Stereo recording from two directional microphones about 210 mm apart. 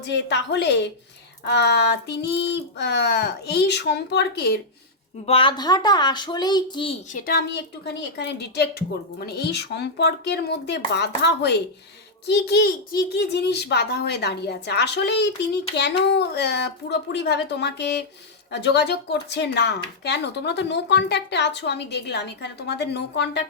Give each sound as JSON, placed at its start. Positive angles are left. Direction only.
{"t": 0.0, "sound": "a woman's voice", "side_deg": 55}
{"t": 5.2, "sound": "speech", "side_deg": 25}
{"t": 7.1, "sound": "speech", "side_deg": 40}